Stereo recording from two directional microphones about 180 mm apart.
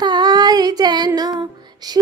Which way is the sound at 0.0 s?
20° right (ahead or behind).